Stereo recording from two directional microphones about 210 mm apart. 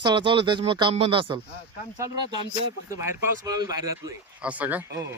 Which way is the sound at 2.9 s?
15° right (ahead or behind).